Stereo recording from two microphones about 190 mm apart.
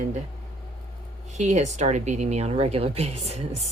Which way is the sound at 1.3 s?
40° right (ahead or behind).